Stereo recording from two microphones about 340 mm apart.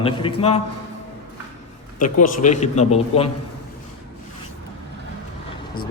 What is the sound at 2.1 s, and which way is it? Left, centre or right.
A man's voice, left.